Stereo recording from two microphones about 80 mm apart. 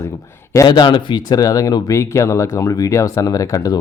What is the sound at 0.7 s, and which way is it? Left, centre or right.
Speech, left.